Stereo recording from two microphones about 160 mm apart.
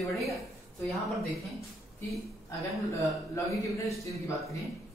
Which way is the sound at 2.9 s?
20° left (ahead or behind).